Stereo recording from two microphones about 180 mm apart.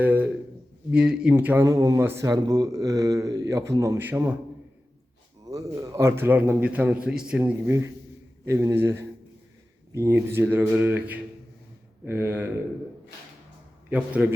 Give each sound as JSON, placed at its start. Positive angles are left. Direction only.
{"t": 0.0, "sound": "a sound", "side_deg": -10}
{"t": 0.9, "sound": "a man's voice", "side_deg": -5}
{"t": 5.5, "sound": "a man's voice", "side_deg": -20}
{"t": 8.4, "sound": "a man's voice", "side_deg": -15}
{"t": 13.9, "sound": "a man's voice", "side_deg": -10}